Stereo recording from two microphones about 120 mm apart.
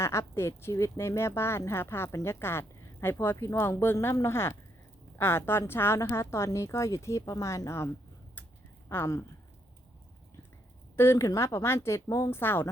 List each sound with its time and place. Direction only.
0.0 s speech: 20° left (ahead or behind)
8.9 s speech: 20° left (ahead or behind)
10.9 s speech: 20° left (ahead or behind)